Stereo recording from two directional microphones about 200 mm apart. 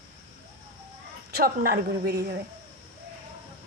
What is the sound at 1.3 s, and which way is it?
A woman's voice, 50° right (ahead or behind).